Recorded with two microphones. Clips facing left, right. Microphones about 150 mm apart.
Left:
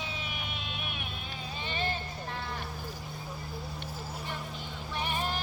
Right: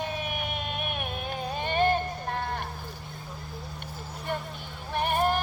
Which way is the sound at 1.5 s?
55° right (ahead or behind).